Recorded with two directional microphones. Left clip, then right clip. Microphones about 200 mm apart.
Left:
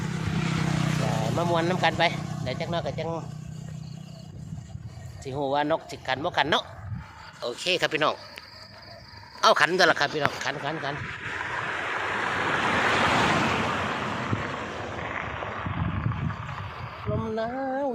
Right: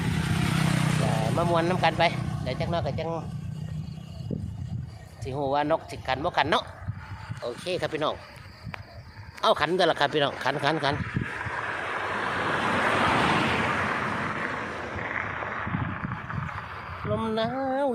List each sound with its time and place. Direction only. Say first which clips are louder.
0.0 s vehicle: right 2 dB; 45° right (ahead or behind)
0.9 s speech: even; 5° right (ahead or behind)
2.1 s vehicle: even; 20° left (ahead or behind)
2.4 s speech: right 1 dB; centre (ahead or behind)
5.2 s speech: even; centre (ahead or behind)
9.4 s speech: left 3 dB; 5° right (ahead or behind)
10.4 s speech: right 4 dB; 50° right (ahead or behind)
10.9 s vehicle: even; 50° left (ahead or behind)
13.5 s a sound: right 1 dB; 15° left (ahead or behind)
13.7 s vehicle: right 1 dB; centre (ahead or behind)
17.2 s music: right 1 dB; 30° right (ahead or behind)